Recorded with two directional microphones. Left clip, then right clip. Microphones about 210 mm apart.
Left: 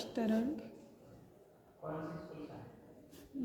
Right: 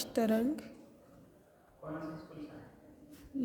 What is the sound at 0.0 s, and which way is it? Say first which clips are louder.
Speech: right 5 dB; 35° right (ahead or behind).